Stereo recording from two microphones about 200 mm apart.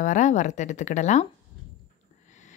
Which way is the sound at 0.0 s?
40° left (ahead or behind).